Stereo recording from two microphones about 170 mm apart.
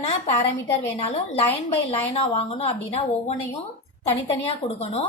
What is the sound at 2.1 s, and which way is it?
A woman's voice, 35° left (ahead or behind).